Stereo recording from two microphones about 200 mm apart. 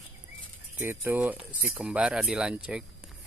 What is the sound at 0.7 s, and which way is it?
Speech, 10° right (ahead or behind).